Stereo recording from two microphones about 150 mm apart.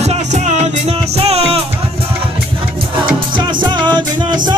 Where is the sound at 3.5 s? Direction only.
30° right (ahead or behind).